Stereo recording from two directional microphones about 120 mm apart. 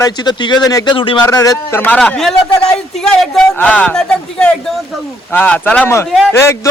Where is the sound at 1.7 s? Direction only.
15° left (ahead or behind).